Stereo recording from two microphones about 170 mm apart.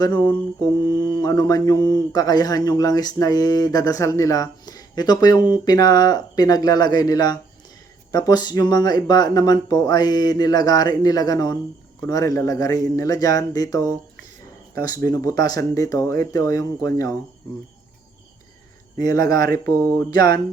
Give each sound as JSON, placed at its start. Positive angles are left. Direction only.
{"t": 0.0, "sound": "mantra", "side_deg": 25}
{"t": 18.9, "sound": "mantra", "side_deg": 20}